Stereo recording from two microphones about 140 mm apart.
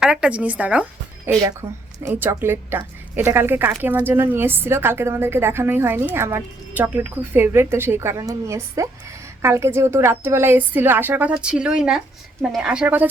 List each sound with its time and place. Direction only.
0.0 s a woman's voice: 5° right (ahead or behind)